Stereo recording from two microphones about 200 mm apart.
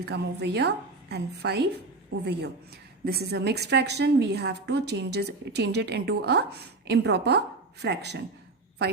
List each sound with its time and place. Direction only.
0.0 s a woman's voice: 55° right (ahead or behind)
3.1 s a woman's voice: 55° right (ahead or behind)